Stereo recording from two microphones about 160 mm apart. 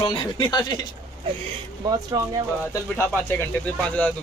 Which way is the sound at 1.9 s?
25° right (ahead or behind).